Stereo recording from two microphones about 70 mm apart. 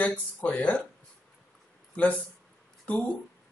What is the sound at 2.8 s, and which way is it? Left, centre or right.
Speech, centre.